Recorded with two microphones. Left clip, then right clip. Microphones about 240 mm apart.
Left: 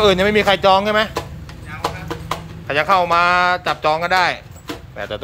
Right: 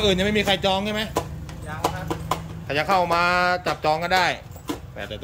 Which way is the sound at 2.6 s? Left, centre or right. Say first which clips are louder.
Left 5 dB; centre.